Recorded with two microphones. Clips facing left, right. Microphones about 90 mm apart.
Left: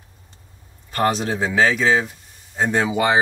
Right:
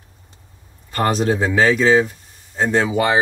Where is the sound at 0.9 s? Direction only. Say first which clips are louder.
Right 2 dB; centre (ahead or behind).